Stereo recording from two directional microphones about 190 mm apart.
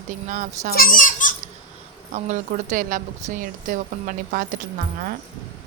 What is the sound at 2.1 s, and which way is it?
A woman's voice, 40° right (ahead or behind).